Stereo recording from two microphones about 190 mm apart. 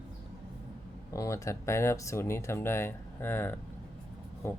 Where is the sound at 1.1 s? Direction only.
15° left (ahead or behind).